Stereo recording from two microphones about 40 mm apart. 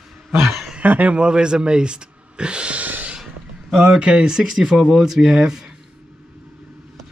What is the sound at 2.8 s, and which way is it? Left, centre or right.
Gasp, right.